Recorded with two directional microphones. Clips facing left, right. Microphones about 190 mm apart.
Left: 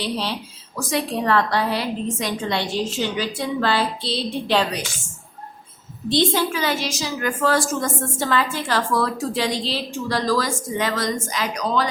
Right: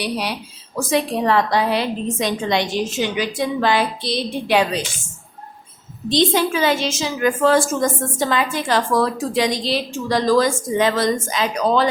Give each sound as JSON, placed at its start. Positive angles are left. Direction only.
{"t": 0.0, "sound": "a woman's voice", "side_deg": -15}
{"t": 6.1, "sound": "speech", "side_deg": -20}